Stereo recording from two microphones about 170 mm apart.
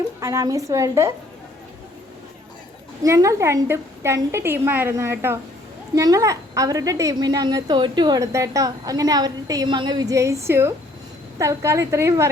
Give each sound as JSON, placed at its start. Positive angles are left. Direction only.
{"t": 0.2, "sound": "a woman's voice", "side_deg": -15}
{"t": 3.0, "sound": "a woman's voice", "side_deg": -20}